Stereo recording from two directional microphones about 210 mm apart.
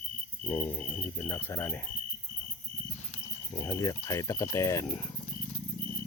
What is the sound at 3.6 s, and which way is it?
Speech, 15° left (ahead or behind).